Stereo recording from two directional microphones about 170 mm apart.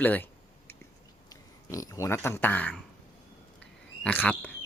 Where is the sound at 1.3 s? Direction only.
20° left (ahead or behind).